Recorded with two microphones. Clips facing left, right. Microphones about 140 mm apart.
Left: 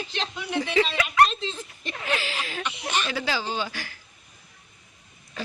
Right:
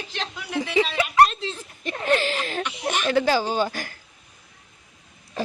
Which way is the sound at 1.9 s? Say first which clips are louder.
Right 7 dB; 45° right (ahead or behind).